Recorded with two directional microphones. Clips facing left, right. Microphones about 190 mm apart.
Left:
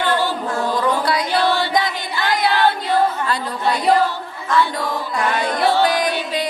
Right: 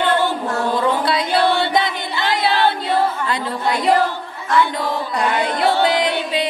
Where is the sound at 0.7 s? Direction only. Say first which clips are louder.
Even; 25° right (ahead or behind).